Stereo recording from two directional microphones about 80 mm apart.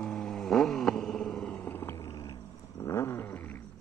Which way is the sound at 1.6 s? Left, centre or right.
Left.